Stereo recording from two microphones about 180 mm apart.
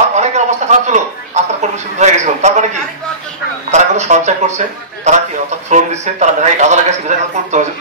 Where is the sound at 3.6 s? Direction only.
40° right (ahead or behind).